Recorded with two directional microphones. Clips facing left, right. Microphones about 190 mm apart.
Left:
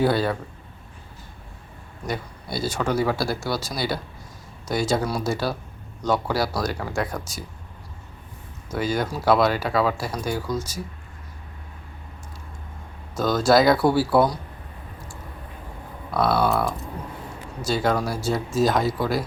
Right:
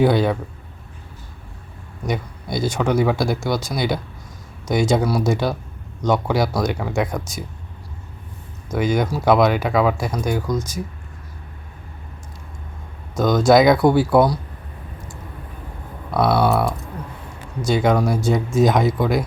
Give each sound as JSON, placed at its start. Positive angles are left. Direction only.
{"t": 0.0, "sound": "speech", "side_deg": -15}
{"t": 2.0, "sound": "speech", "side_deg": -15}
{"t": 6.7, "sound": "speech", "side_deg": 0}
{"t": 8.8, "sound": "speech", "side_deg": -15}
{"t": 13.1, "sound": "speech", "side_deg": -15}
{"t": 16.1, "sound": "speech", "side_deg": 0}
{"t": 18.6, "sound": "speech", "side_deg": -20}